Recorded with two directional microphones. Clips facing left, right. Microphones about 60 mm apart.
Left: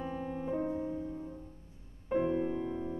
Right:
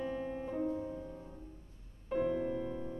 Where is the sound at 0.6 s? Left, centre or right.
Left.